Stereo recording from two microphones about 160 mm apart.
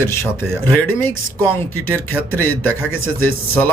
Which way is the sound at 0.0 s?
15° left (ahead or behind).